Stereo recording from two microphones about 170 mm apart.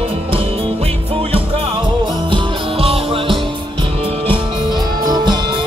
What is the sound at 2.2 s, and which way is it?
Music, 30° right (ahead or behind).